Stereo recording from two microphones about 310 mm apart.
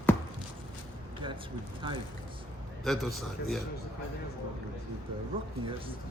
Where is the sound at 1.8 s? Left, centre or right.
Centre.